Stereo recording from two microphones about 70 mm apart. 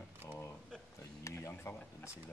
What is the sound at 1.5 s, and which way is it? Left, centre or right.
Speech, left.